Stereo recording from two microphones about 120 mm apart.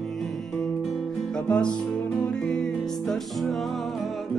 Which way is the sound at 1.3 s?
10° left (ahead or behind).